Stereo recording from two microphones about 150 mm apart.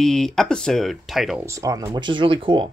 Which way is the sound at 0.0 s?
5° left (ahead or behind).